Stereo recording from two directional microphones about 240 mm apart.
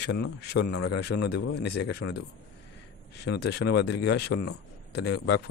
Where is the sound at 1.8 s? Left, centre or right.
Left.